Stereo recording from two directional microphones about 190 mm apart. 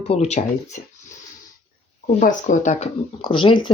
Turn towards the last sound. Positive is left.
turn(degrees=25)  # may be behind; listen again after turning